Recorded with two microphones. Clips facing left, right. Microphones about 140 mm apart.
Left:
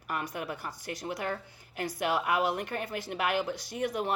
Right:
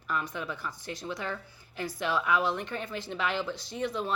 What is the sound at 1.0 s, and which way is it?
Speech, 35° left (ahead or behind).